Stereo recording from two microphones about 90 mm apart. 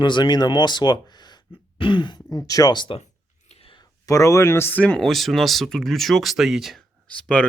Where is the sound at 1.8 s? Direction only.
65° left (ahead or behind).